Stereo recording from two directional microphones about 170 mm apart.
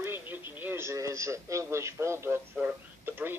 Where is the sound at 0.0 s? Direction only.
10° right (ahead or behind).